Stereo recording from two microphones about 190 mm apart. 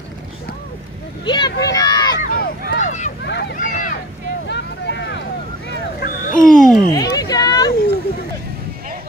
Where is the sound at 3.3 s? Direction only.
60° left (ahead or behind); by 3.9 s 45° left (ahead or behind).